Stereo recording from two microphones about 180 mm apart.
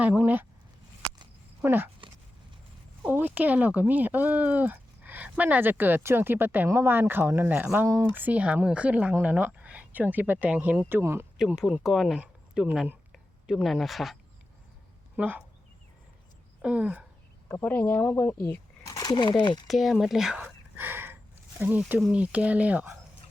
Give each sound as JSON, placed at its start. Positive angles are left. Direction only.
{"t": 0.0, "sound": "speech", "side_deg": -10}
{"t": 1.6, "sound": "speech", "side_deg": -10}
{"t": 3.0, "sound": "speech", "side_deg": -10}
{"t": 11.6, "sound": "speech", "side_deg": -5}
{"t": 16.6, "sound": "speech", "side_deg": -5}
{"t": 17.5, "sound": "speech", "side_deg": 10}
{"t": 19.6, "sound": "speech", "side_deg": 0}